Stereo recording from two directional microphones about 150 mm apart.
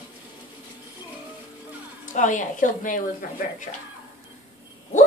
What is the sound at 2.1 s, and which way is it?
A woman's voice, 55° left (ahead or behind).